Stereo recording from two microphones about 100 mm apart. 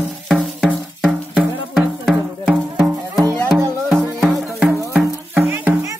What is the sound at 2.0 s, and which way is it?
Music, 5° right (ahead or behind).